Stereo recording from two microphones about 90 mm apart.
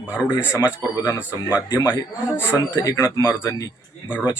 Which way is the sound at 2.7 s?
50° left (ahead or behind).